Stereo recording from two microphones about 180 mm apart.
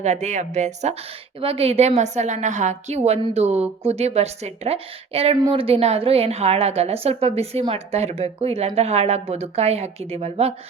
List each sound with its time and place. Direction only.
0.0 s a woman's voice: 40° right (ahead or behind)